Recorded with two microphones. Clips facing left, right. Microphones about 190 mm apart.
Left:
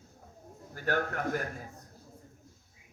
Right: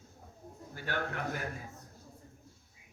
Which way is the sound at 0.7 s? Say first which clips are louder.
Left 5 dB; 45° left (ahead or behind).